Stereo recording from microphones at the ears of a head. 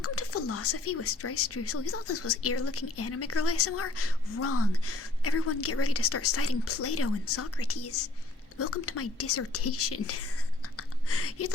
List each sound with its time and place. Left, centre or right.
0.0 s speech: left